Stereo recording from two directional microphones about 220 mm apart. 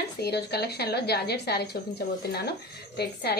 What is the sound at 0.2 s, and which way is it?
A woman's voice, 50° left (ahead or behind).